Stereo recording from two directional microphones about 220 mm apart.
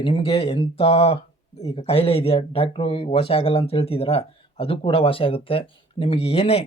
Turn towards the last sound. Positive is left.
turn(degrees=25)  # may be behind; listen again after turning